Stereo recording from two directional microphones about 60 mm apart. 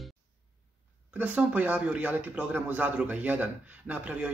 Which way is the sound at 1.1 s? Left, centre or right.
Right.